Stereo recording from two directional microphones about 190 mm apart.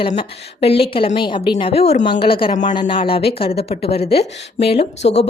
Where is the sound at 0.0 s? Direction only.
30° left (ahead or behind).